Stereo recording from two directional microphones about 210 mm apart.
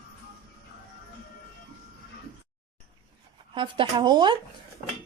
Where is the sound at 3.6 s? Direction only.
20° right (ahead or behind).